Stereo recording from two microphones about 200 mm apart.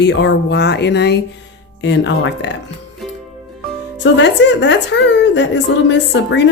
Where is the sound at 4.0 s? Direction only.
60° left (ahead or behind).